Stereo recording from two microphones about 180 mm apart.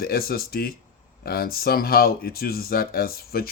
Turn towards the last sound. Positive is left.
turn(degrees=55)  # may be behind; listen again after turning